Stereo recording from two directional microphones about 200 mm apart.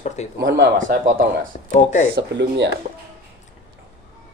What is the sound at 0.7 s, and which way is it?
Speech, 40° right (ahead or behind).